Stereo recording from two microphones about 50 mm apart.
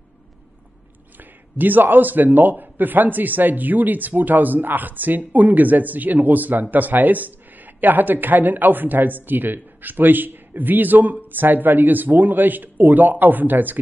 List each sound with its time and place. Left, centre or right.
1.1 s a man's voice: right